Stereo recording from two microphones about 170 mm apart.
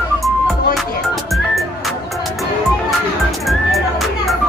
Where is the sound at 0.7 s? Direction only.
Centre (ahead or behind).